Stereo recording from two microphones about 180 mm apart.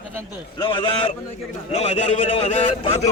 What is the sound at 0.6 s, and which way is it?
A man's voice, 30° left (ahead or behind).